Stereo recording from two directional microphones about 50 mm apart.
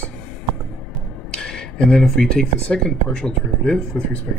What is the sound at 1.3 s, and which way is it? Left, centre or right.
Speech, centre.